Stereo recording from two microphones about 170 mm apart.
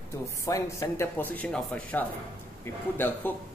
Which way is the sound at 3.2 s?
10° left (ahead or behind).